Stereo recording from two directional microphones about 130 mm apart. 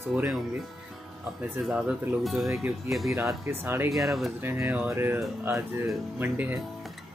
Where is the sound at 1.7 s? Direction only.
5° right (ahead or behind).